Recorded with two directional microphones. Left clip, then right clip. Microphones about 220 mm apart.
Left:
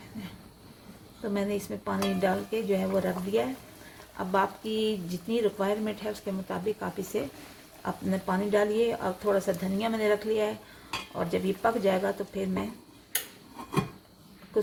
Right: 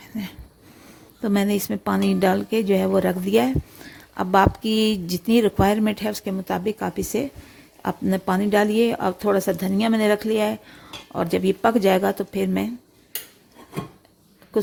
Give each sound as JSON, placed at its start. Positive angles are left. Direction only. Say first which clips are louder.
{"t": 1.2, "sound": "speech", "louder": "right 8 dB", "side_deg": -50}